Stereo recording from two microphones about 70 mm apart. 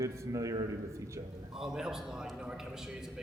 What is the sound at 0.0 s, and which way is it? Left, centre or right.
A man's voice, right.